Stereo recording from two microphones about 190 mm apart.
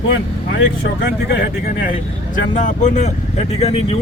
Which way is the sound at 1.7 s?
45° left (ahead or behind).